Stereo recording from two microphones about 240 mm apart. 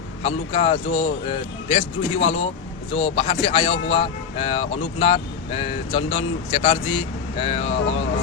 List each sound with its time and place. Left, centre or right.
0.2 s speech: left